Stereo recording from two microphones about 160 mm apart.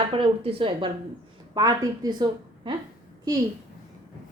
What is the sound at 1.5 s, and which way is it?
A woman's voice, 25° right (ahead or behind).